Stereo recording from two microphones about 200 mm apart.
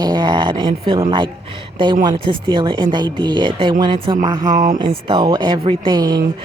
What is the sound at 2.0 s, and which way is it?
Speech, 25° right (ahead or behind).